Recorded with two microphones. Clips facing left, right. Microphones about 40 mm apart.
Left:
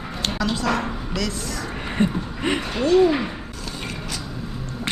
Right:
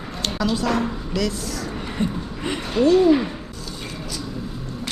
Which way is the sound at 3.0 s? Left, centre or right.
Centre.